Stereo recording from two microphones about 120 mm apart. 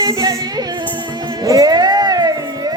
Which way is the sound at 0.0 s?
30° right (ahead or behind).